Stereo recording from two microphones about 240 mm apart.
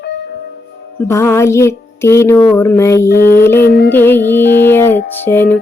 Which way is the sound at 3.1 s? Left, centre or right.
Left.